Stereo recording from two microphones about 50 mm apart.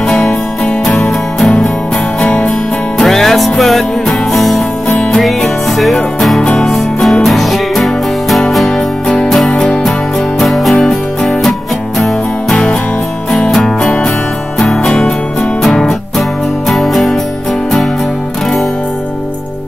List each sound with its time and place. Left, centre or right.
0.8 s music: centre
2.2 s music: centre
3.0 s music: centre
6.4 s music: centre
16.2 s music: centre